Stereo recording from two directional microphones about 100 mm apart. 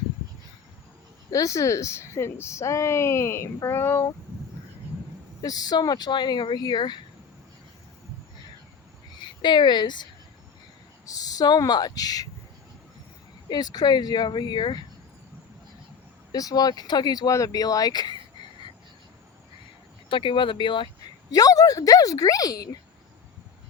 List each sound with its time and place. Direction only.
1.3 s speech: 35° left (ahead or behind)
5.4 s speech: 40° left (ahead or behind)
9.1 s speech: 50° left (ahead or behind)
11.0 s speech: 35° left (ahead or behind)
13.5 s speech: 45° left (ahead or behind)
16.3 s speech: 35° left (ahead or behind)
20.1 s speech: 60° left (ahead or behind)
21.2 s speech: 40° left (ahead or behind)